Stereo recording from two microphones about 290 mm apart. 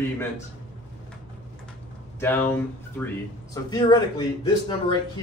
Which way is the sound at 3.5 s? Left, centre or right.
Centre.